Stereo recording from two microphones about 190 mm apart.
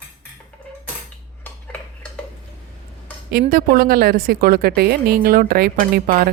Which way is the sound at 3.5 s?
50° right (ahead or behind).